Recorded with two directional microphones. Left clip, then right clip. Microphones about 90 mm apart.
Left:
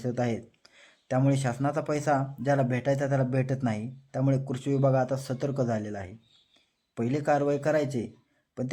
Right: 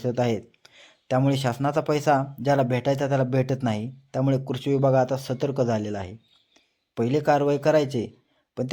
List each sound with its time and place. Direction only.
0.0 s speech: 25° right (ahead or behind)